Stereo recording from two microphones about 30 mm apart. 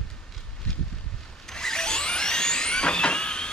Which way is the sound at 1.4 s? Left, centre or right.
Centre.